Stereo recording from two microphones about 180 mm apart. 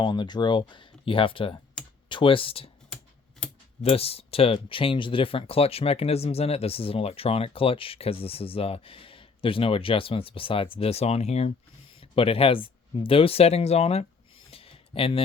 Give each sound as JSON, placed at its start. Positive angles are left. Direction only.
{"t": 0.0, "sound": "speech", "side_deg": 25}
{"t": 3.4, "sound": "typing", "side_deg": 5}
{"t": 3.8, "sound": "speech", "side_deg": 35}
{"t": 14.5, "sound": "a sound", "side_deg": 30}